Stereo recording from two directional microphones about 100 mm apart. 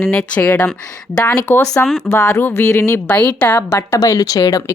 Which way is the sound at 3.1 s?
15° left (ahead or behind).